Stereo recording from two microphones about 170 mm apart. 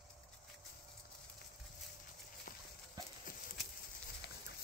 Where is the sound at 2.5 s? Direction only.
55° left (ahead or behind).